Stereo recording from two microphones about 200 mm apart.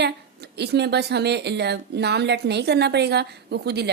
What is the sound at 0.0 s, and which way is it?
A woman's voice, 55° right (ahead or behind).